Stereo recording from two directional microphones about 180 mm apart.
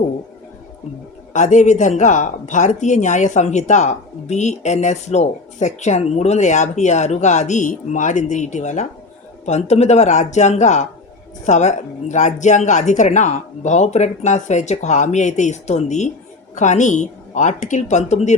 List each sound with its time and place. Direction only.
1.3 s a woman's voice: 45° left (ahead or behind)